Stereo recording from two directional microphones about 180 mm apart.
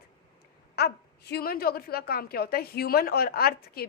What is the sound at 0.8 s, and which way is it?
A woman's voice, 65° left (ahead or behind).